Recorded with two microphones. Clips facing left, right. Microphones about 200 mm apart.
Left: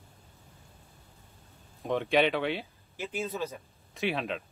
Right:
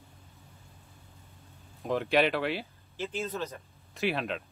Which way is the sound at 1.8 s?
Centre (ahead or behind).